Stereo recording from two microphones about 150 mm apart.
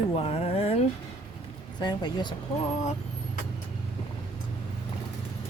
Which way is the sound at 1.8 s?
30° left (ahead or behind).